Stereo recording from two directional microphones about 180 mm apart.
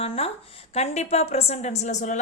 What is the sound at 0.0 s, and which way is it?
A woman's voice, 30° left (ahead or behind).